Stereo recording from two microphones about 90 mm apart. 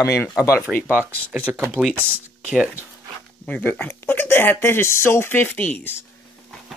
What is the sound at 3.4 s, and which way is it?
Speech, 15° left (ahead or behind).